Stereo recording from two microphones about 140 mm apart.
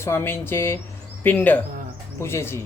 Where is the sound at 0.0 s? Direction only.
15° left (ahead or behind).